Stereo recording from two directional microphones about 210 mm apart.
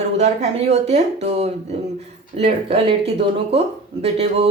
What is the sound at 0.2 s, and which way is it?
Speech, 30° right (ahead or behind).